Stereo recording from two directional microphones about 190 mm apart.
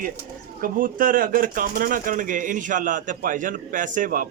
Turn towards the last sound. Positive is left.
turn(degrees=-45)  # may be behind; listen again after turning